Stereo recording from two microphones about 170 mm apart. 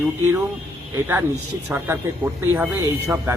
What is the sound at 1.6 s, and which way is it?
A man's voice, 10° right (ahead or behind).